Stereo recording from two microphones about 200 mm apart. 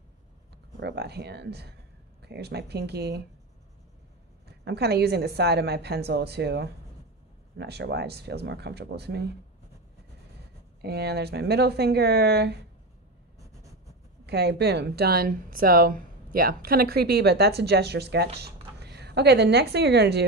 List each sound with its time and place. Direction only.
0.7 s a woman's voice: 55° right (ahead or behind)
4.6 s a woman's voice: 55° right (ahead or behind)
10.8 s a woman's voice: 55° right (ahead or behind)
14.2 s a woman's voice: 55° right (ahead or behind)